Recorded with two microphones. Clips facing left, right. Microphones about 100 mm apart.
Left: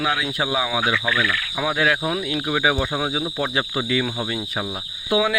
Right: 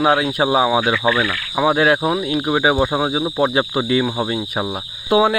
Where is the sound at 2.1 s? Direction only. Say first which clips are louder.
Right 5 dB; 20° right (ahead or behind).